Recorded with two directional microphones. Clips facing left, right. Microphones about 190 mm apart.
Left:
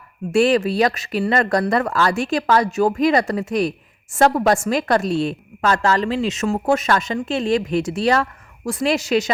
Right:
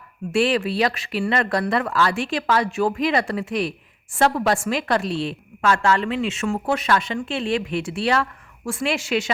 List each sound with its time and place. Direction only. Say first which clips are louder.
0.3 s speech: left 4 dB; 45° left (ahead or behind)